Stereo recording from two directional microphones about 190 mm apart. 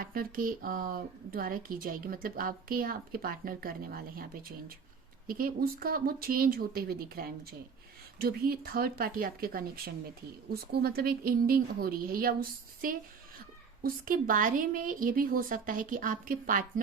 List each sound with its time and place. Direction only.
0.0 s speech: 50° right (ahead or behind)